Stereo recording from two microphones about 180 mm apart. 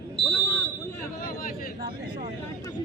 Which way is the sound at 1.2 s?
55° left (ahead or behind).